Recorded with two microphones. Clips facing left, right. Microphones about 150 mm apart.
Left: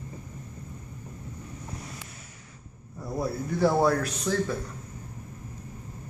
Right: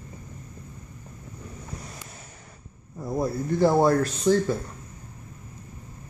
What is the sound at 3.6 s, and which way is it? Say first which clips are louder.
Speech: right 3 dB; 20° right (ahead or behind).